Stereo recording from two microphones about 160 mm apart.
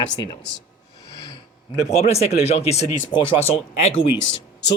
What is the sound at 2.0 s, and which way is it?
Speech, 40° left (ahead or behind).